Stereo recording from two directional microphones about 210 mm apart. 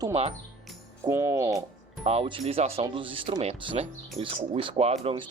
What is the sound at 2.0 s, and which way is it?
Speech, 30° right (ahead or behind).